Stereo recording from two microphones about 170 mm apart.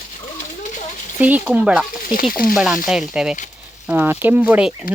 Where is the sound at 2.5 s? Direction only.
5° right (ahead or behind).